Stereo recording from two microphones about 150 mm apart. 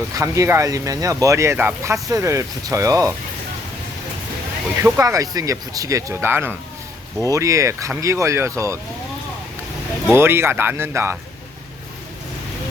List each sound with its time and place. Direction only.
0.2 s speech: 20° right (ahead or behind)
4.8 s speech: 20° right (ahead or behind)
10.1 s speech: 15° right (ahead or behind)